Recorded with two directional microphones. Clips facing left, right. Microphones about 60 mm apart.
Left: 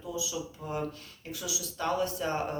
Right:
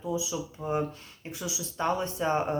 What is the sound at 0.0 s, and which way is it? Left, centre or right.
Speech, right.